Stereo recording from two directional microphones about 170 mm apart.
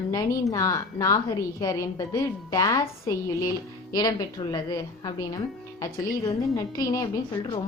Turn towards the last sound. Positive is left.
turn(degrees=20)  # may be behind; listen again after turning